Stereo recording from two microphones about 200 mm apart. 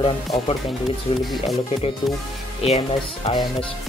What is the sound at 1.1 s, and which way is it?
Speech, 25° left (ahead or behind).